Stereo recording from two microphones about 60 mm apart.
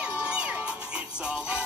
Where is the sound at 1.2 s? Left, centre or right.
Centre.